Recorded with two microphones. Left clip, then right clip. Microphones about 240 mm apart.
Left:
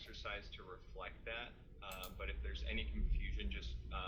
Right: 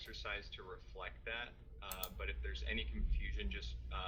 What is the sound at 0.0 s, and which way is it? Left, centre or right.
Speech, right.